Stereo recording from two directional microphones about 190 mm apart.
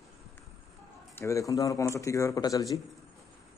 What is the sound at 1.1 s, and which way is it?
Speech, 15° left (ahead or behind).